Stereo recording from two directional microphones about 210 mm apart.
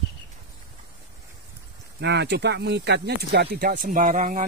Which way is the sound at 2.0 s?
55° right (ahead or behind).